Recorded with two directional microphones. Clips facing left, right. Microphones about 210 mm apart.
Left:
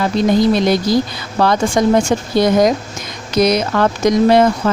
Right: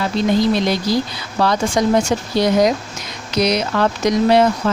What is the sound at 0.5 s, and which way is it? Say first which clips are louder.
Speech: left 4 dB; 50° left (ahead or behind).